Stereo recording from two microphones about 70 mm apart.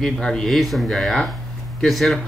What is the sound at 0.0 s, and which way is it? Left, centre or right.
Speech, centre.